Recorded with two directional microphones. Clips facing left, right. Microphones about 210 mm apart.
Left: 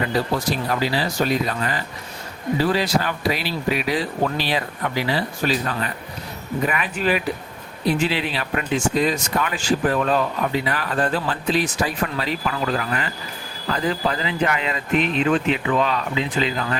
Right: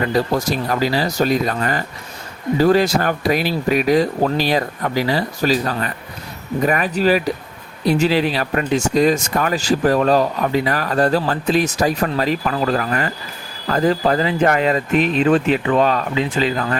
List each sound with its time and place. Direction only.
0.3 s speech: 45° right (ahead or behind)